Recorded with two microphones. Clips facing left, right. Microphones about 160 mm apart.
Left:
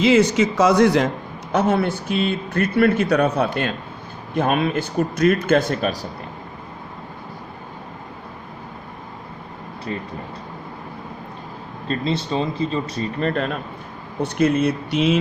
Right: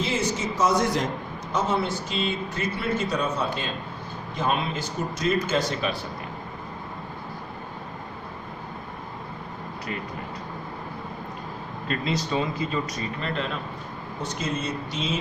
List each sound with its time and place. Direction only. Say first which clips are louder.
0.0 s speech: left 11 dB; 75° left (ahead or behind); by 6.1 s 45° left (ahead or behind)
9.9 s speech: left 5 dB; 30° left (ahead or behind)
11.9 s speech: left 4 dB; 30° left (ahead or behind); by 15.2 s 65° left (ahead or behind)